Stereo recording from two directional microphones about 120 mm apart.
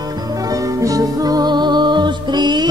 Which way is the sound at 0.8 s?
30° right (ahead or behind).